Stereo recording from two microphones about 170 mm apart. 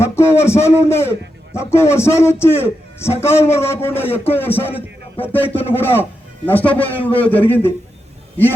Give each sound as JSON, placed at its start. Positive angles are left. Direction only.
{"t": 0.0, "sound": "a man's voice", "side_deg": 15}